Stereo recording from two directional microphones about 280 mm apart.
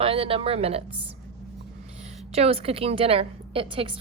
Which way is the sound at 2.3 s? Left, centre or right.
Right.